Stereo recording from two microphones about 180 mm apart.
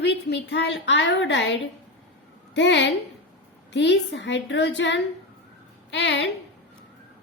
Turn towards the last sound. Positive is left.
turn(degrees=80)